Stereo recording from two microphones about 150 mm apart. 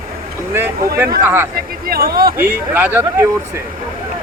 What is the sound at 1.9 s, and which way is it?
Speech, 90° right.